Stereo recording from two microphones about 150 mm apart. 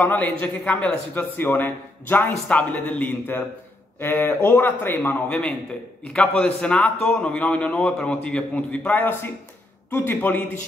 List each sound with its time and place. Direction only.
0.0 s a man's voice: 10° left (ahead or behind)